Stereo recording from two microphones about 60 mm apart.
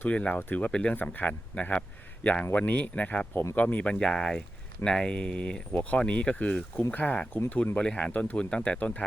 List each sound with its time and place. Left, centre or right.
0.1 s speech: left
0.3 s speech: left
0.6 s speech: centre
0.9 s speech: left
3.9 s speech: centre
8.8 s speech: left